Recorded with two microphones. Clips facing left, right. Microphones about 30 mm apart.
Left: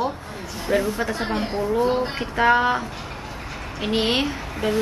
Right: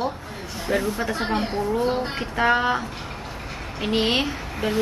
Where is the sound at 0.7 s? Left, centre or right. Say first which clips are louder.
Left 2 dB; centre.